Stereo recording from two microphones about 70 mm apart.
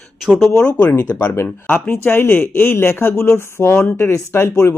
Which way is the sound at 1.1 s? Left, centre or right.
Left.